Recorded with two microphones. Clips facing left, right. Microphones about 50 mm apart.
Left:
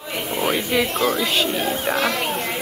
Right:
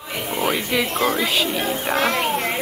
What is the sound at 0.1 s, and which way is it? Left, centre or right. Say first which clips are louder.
Speech: even; centre.